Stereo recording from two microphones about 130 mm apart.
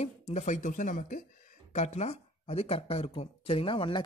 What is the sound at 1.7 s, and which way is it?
Speech, 60° left (ahead or behind).